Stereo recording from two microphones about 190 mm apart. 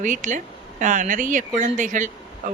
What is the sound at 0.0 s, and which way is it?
Speech, 40° right (ahead or behind).